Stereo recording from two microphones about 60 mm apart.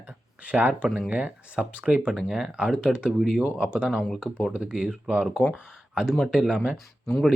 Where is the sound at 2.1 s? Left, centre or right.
Centre.